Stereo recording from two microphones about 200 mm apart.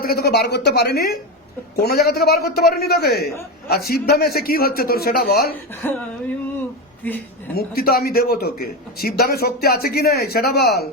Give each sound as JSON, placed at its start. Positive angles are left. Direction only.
{"t": 0.0, "sound": "a man's voice", "side_deg": 50}
{"t": 5.8, "sound": "a woman's voice", "side_deg": 10}
{"t": 7.0, "sound": "a woman's voice", "side_deg": 10}
{"t": 7.5, "sound": "a man's voice", "side_deg": 50}